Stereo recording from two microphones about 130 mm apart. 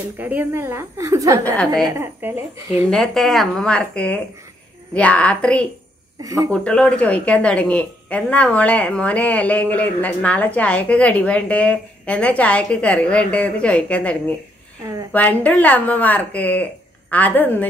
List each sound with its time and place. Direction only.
0.2 s a woman's voice: 15° right (ahead or behind)
2.9 s a woman's voice: centre (ahead or behind)
6.2 s a woman's voice: 30° right (ahead or behind)
6.5 s a woman's voice: 5° left (ahead or behind)